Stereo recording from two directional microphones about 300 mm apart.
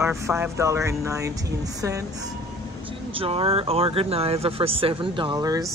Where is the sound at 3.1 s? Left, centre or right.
Centre.